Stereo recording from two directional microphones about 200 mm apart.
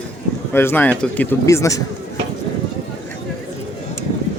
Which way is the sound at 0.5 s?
10° left (ahead or behind).